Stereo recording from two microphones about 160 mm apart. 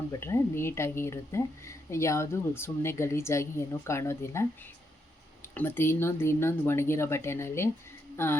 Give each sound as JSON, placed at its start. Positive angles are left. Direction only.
{"t": 0.1, "sound": "a woman's voice", "side_deg": 15}
{"t": 5.5, "sound": "a woman's voice", "side_deg": 15}
{"t": 8.1, "sound": "a sound", "side_deg": 15}